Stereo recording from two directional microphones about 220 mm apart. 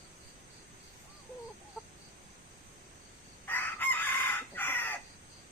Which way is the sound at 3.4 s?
10° left (ahead or behind).